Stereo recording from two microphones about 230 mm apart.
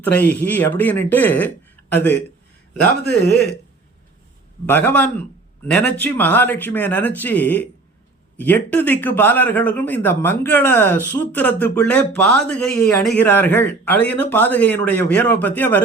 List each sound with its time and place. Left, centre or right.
0.0 s speech: centre
3.2 s speech: left
4.6 s speech: centre